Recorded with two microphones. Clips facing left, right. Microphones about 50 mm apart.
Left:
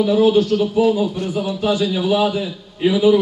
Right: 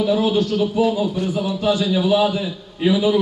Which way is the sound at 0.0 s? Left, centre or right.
Centre.